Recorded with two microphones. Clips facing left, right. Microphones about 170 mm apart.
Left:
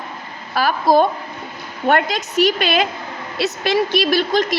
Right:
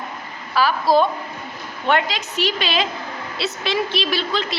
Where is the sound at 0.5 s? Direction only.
50° left (ahead or behind).